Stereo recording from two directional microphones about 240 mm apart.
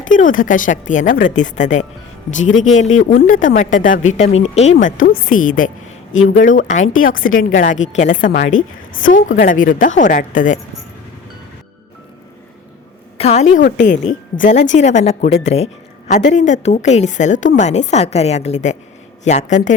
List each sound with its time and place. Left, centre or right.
0.1 s a woman's voice: left
13.1 s a woman's voice: left